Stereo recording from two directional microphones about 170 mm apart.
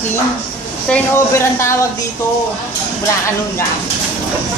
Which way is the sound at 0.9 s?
15° left (ahead or behind).